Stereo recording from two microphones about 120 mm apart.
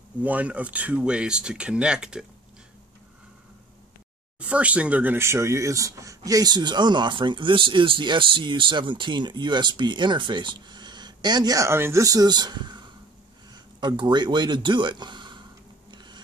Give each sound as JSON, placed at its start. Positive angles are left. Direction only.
{"t": 0.2, "sound": "speech", "side_deg": -10}
{"t": 4.5, "sound": "speech", "side_deg": -10}